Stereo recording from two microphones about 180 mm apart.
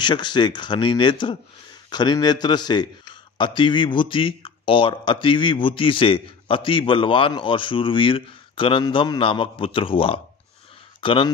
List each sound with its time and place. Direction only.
0.0 s speech: 25° left (ahead or behind)